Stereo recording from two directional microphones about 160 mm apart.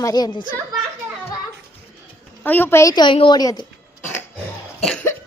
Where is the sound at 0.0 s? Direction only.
25° left (ahead or behind).